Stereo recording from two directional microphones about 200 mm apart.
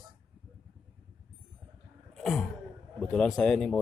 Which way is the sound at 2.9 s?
5° left (ahead or behind).